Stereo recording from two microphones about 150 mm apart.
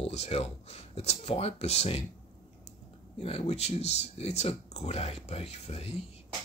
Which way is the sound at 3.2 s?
45° left (ahead or behind).